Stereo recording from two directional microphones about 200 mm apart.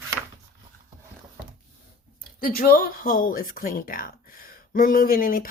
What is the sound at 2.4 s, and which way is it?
Speech, 45° left (ahead or behind).